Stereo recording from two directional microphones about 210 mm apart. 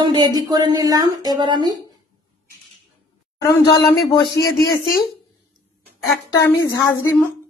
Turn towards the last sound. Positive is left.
turn(degrees=15)  # may be behind; listen again after turning